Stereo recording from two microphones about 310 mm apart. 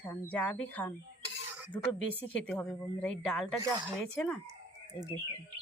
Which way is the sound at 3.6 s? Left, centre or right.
Centre.